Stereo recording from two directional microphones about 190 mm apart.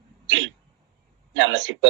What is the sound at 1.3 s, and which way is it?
Speech, 85° right.